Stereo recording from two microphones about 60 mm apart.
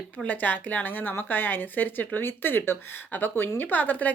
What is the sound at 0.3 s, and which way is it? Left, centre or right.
A woman's voice, left.